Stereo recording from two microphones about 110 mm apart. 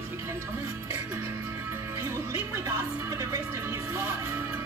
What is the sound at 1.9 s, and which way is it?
Music, 25° right (ahead or behind).